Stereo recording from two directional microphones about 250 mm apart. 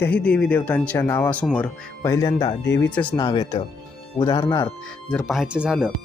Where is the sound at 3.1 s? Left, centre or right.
Centre.